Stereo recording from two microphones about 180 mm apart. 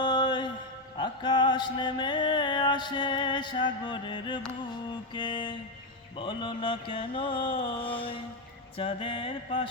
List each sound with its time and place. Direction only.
0.0 s music: 25° left (ahead or behind)
5.1 s mantra: 25° left (ahead or behind)